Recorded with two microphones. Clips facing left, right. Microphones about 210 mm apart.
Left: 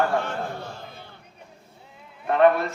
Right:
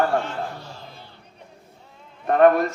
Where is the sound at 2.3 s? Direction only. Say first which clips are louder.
Right 3 dB; 45° right (ahead or behind).